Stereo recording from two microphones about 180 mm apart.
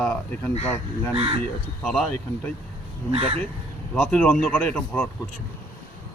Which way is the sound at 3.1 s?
30° right (ahead or behind).